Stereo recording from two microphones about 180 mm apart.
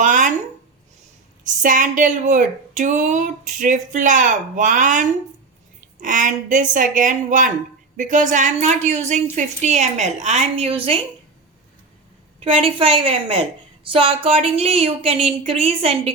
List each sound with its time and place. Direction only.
0.0 s a sound: 45° right (ahead or behind)
1.5 s a woman's voice: 45° right (ahead or behind); by 11.0 s 30° right (ahead or behind)
12.4 s a woman's voice: 30° right (ahead or behind)